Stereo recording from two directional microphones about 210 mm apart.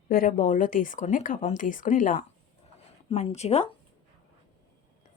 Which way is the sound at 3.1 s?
30° left (ahead or behind).